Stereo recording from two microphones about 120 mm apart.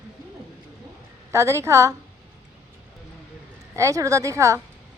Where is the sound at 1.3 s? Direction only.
25° right (ahead or behind).